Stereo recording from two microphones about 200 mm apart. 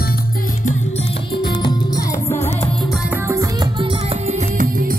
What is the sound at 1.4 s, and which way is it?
Music, 20° left (ahead or behind).